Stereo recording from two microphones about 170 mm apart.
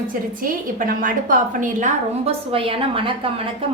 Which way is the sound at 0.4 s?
55° right (ahead or behind).